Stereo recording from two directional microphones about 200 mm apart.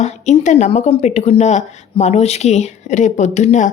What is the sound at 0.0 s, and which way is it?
Speech, 35° left (ahead or behind).